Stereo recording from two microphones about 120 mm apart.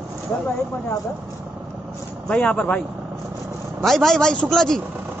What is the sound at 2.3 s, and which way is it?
Speech, 10° left (ahead or behind).